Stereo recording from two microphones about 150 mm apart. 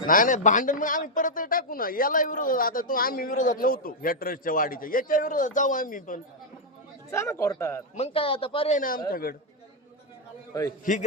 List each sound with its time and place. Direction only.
0.1 s a man's voice: 60° left (ahead or behind)
7.1 s speech: 20° left (ahead or behind)
7.9 s a man's voice: 40° left (ahead or behind)
8.7 s a man's voice: 70° left (ahead or behind)
10.5 s speech: 25° left (ahead or behind)